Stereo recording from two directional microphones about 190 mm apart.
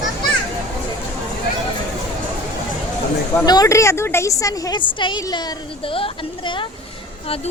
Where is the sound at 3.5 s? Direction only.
20° left (ahead or behind).